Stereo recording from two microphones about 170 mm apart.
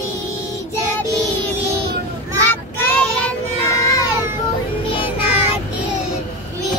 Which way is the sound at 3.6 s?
20° left (ahead or behind).